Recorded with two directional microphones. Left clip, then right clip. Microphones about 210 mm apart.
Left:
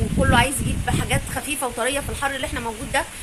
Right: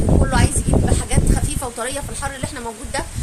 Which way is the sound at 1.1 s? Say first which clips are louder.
Even; 15° left (ahead or behind).